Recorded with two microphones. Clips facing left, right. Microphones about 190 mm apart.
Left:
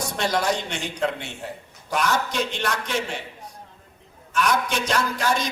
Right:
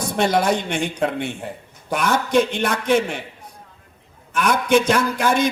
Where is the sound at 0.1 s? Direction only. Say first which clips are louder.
Right 6 dB; 55° right (ahead or behind).